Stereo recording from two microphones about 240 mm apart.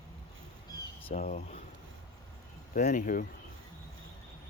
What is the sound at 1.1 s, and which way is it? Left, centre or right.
Speech, left.